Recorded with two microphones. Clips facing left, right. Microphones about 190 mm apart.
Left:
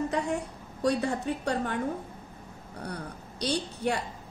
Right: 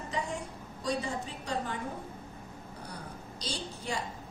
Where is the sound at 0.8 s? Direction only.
65° left (ahead or behind).